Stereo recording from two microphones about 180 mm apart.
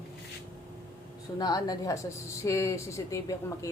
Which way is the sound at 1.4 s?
20° left (ahead or behind).